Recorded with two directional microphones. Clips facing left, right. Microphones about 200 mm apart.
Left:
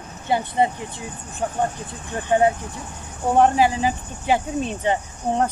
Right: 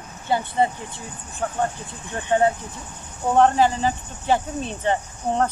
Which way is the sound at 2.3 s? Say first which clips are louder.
Left 1 dB; 15° left (ahead or behind).